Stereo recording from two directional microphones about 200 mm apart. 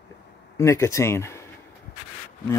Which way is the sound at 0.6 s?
15° left (ahead or behind).